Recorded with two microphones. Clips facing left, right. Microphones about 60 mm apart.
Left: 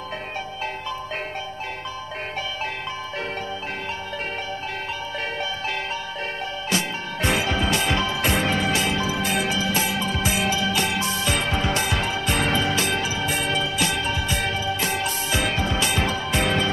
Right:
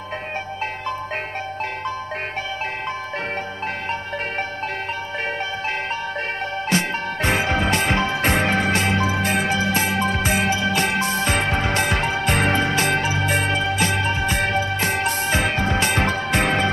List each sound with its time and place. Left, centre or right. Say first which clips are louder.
6.7 s music: right 4 dB; right